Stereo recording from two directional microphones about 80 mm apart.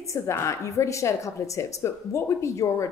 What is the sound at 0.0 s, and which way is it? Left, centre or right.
A woman's voice, left.